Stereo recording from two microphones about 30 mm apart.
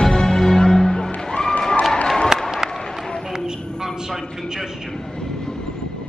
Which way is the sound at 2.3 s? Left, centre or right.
Centre.